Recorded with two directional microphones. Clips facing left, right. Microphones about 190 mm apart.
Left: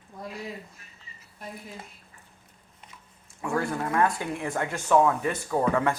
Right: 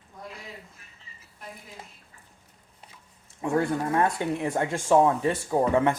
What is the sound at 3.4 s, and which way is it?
Speech, 25° right (ahead or behind).